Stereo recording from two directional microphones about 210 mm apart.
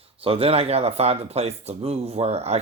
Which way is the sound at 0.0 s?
25° right (ahead or behind).